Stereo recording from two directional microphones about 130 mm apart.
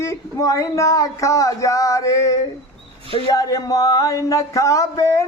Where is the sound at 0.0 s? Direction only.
25° left (ahead or behind).